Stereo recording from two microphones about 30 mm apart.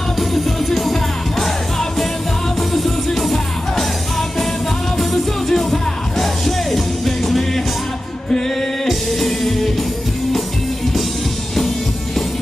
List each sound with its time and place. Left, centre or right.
0.3 s music: centre
5.5 s music: centre
8.3 s music: left
8.8 s music: centre